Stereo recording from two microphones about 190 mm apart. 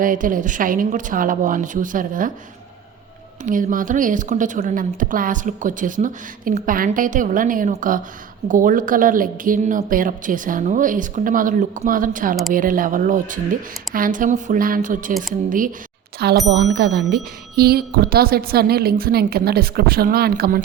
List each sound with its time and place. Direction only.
0.0 s a woman's voice: 45° right (ahead or behind)
3.4 s a woman's voice: 45° right (ahead or behind)
16.2 s a woman's voice: 60° right (ahead or behind)